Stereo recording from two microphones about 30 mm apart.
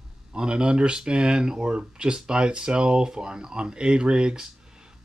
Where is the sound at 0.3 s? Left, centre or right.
Right.